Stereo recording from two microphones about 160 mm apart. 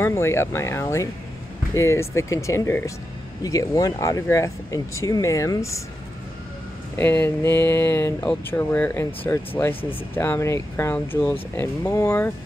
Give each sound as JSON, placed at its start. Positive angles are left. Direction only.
{"t": 0.0, "sound": "speech", "side_deg": 15}
{"t": 7.0, "sound": "speech", "side_deg": 15}